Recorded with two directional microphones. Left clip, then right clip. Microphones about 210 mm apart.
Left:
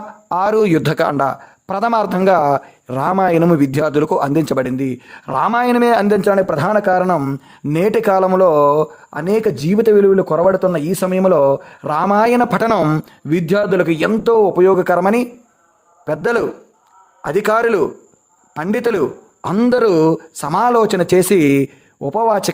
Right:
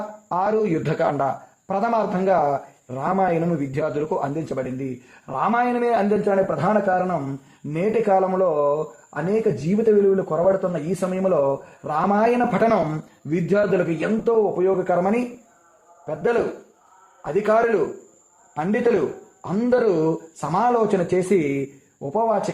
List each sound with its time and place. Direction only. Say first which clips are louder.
0.3 s speech: left 7 dB; 30° left (ahead or behind)